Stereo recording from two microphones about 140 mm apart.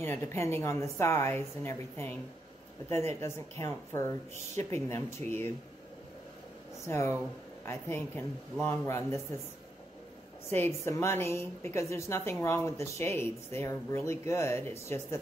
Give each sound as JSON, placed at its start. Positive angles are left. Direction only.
{"t": 0.0, "sound": "a woman's voice", "side_deg": 15}
{"t": 6.9, "sound": "a woman's voice", "side_deg": 20}
{"t": 10.5, "sound": "a woman's voice", "side_deg": 20}